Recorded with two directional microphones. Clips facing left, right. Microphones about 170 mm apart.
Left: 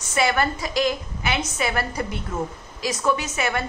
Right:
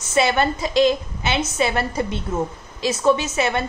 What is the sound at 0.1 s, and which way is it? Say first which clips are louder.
A woman's voice: right 3 dB; 25° right (ahead or behind).